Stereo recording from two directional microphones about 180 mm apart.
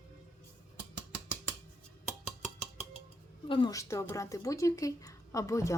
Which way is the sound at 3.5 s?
25° left (ahead or behind).